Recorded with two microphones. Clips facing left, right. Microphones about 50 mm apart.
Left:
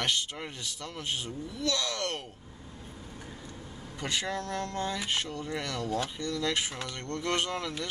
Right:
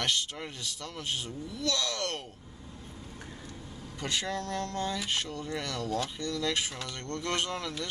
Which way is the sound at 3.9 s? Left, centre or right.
Centre.